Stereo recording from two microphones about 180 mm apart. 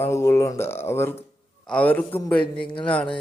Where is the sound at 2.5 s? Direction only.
30° left (ahead or behind).